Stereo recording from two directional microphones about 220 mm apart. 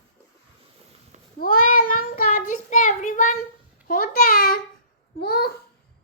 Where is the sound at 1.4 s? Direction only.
40° left (ahead or behind).